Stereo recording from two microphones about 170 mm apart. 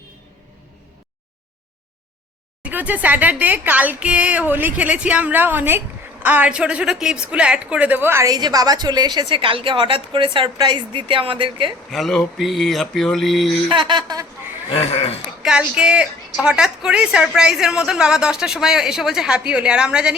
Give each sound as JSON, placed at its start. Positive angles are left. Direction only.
{"t": 2.6, "sound": "speech", "side_deg": -10}
{"t": 11.9, "sound": "a woman's voice", "side_deg": 0}
{"t": 13.7, "sound": "speech", "side_deg": -30}
{"t": 14.7, "sound": "speech", "side_deg": 35}
{"t": 15.4, "sound": "a woman's voice", "side_deg": -5}